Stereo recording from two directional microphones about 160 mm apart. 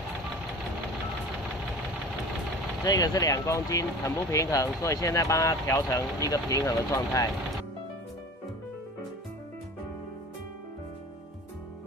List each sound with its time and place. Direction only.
2.8 s speech: 25° left (ahead or behind)